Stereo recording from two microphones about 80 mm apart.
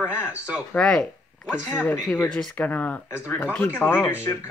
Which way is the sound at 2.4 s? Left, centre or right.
Centre.